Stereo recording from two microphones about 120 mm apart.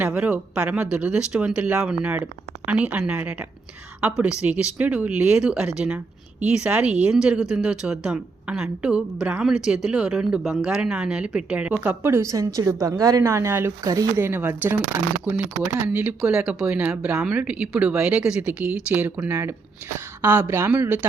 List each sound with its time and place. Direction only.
0.0 s a woman's voice: 10° right (ahead or behind)
4.4 s a woman's voice: 10° right (ahead or behind); by 14.1 s 30° right (ahead or behind)
14.2 s a woman's voice: 20° right (ahead or behind)